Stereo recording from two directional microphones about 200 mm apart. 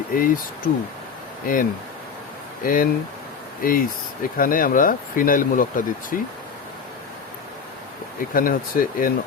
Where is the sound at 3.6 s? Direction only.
45° left (ahead or behind).